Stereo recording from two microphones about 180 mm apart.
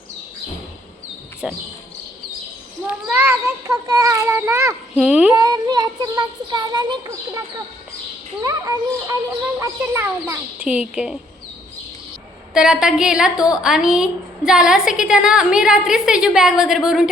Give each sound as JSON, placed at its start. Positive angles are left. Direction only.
{"t": 1.4, "sound": "a woman's voice", "side_deg": -5}
{"t": 2.8, "sound": "a woman's voice", "side_deg": -15}
{"t": 5.3, "sound": "speech", "side_deg": -20}
{"t": 8.4, "sound": "speech", "side_deg": -20}
{"t": 12.5, "sound": "a woman's voice", "side_deg": -5}